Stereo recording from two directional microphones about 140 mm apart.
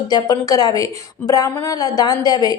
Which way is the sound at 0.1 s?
25° left (ahead or behind).